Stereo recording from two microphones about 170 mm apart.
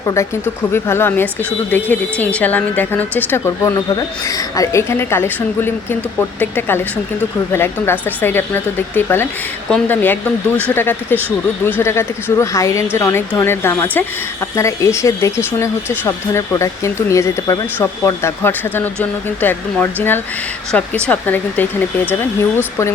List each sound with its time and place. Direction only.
0.0 s speech: 15° left (ahead or behind)